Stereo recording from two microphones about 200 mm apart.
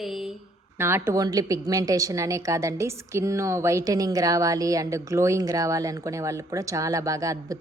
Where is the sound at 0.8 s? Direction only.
10° right (ahead or behind).